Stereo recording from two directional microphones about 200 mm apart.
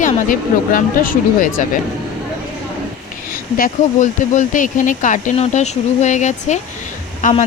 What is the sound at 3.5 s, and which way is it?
Speech, 40° left (ahead or behind).